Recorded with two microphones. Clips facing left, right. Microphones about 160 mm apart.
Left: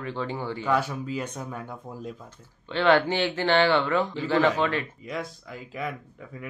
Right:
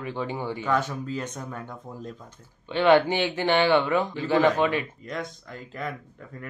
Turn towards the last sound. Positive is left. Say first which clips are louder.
# left 1 dB
turn(degrees=5)  # may be behind; listen again after turning